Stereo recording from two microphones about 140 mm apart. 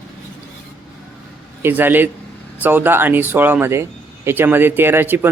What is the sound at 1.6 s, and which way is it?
A man's voice, 15° right (ahead or behind).